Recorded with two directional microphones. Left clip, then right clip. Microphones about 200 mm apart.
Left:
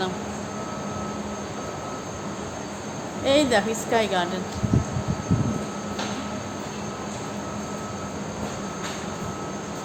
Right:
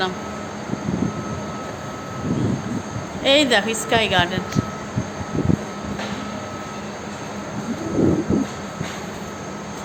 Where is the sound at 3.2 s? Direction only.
30° right (ahead or behind).